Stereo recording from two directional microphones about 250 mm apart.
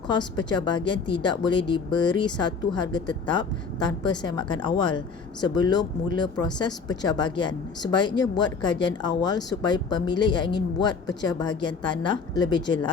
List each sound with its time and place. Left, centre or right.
0.1 s a woman's voice: centre